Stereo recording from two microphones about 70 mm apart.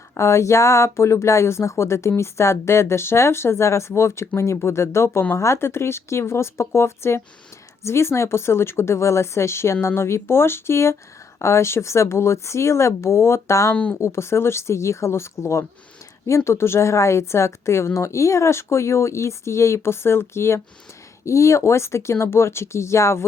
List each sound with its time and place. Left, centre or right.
0.1 s a woman's voice: left
13.7 s speech: centre
14.0 s a woman's voice: left